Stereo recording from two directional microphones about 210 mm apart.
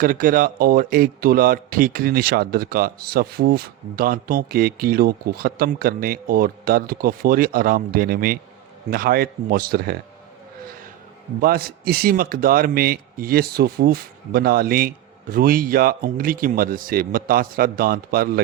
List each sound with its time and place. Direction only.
0.0 s speech: 40° right (ahead or behind)
11.3 s speech: 45° right (ahead or behind)